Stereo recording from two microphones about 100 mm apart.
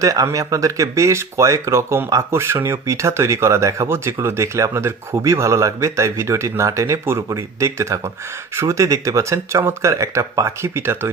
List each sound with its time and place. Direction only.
0.0 s speech: 35° right (ahead or behind)